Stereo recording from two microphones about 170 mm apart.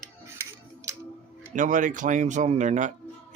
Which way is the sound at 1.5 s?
50° right (ahead or behind).